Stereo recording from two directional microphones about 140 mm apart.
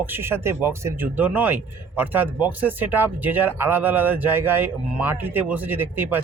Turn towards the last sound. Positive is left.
turn(degrees=-15)  # may be behind; listen again after turning